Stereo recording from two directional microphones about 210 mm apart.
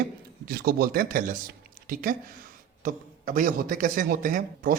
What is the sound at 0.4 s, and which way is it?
A man's voice, 45° right (ahead or behind).